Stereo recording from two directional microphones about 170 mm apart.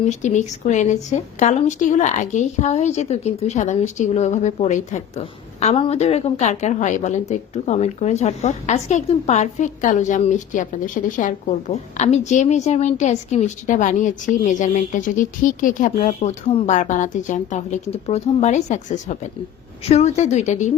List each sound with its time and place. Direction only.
0.0 s a woman's voice: 45° left (ahead or behind)